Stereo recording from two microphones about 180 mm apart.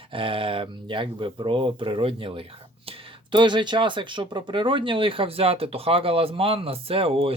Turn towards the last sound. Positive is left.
turn(degrees=-30)  # may be behind; listen again after turning